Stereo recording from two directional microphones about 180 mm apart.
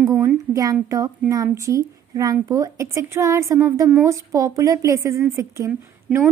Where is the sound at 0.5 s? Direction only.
20° right (ahead or behind).